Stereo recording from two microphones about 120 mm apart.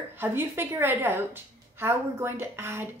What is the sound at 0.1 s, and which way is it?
A woman's voice, 20° right (ahead or behind).